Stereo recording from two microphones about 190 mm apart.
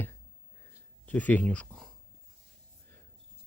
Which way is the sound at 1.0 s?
10° left (ahead or behind).